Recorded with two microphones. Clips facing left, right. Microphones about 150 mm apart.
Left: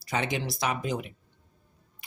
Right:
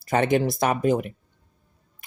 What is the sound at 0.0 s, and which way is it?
Speech, 50° right (ahead or behind).